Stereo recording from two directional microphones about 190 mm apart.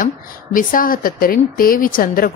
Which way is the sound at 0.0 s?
45° left (ahead or behind).